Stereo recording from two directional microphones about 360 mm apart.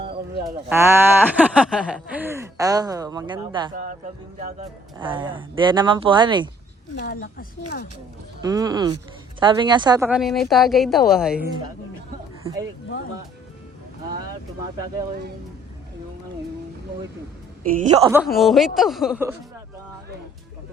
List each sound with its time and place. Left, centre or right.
0.7 s speech: centre
7.0 s speech: left
8.4 s a woman's voice: centre
17.6 s a woman's voice: right
18.0 s a woman's voice: centre